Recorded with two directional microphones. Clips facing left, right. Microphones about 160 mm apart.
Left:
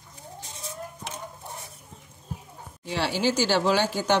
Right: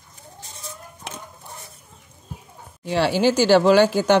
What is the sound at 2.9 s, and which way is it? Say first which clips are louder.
Speech: right 7 dB; 55° right (ahead or behind).